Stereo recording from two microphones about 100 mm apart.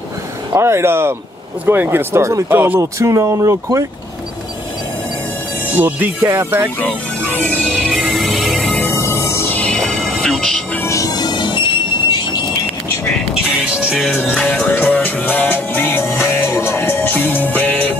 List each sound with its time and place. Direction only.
0.5 s speech: 25° right (ahead or behind)
5.8 s speech: 20° right (ahead or behind)
7.7 s music: centre (ahead or behind)
8.8 s music: 30° left (ahead or behind)
9.7 s music: 5° left (ahead or behind)
10.8 s train: 30° left (ahead or behind); by 12.2 s 55° left (ahead or behind)
13.3 s music: 5° right (ahead or behind)
14.5 s music: 25° left (ahead or behind)